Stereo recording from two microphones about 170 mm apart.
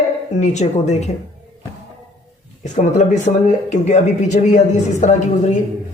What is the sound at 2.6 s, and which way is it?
A man's voice, 45° left (ahead or behind).